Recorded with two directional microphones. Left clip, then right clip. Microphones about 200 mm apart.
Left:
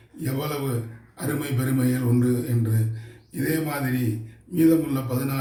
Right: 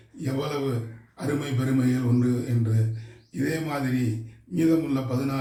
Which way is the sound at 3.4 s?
15° left (ahead or behind).